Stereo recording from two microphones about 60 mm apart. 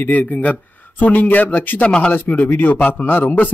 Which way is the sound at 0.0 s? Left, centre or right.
Left.